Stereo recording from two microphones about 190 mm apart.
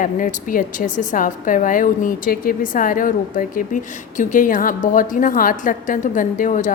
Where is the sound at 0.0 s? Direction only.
45° left (ahead or behind).